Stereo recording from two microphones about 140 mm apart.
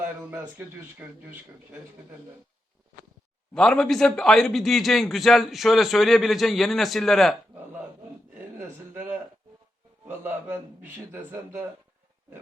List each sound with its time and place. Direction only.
0.0 s a sound: 15° right (ahead or behind)
1.0 s a man's voice: 10° right (ahead or behind)
3.5 s a man's voice: 5° left (ahead or behind)
8.5 s a man's voice: 15° right (ahead or behind)